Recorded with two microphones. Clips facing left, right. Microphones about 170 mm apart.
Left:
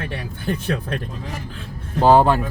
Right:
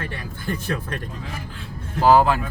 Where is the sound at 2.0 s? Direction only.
30° left (ahead or behind).